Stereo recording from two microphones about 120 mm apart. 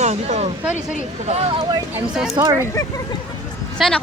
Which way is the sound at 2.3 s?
30° right (ahead or behind).